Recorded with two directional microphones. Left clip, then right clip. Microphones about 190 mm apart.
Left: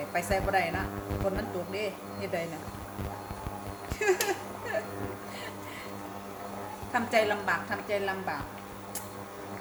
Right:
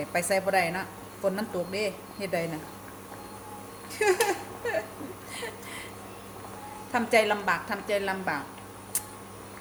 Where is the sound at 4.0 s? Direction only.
25° right (ahead or behind).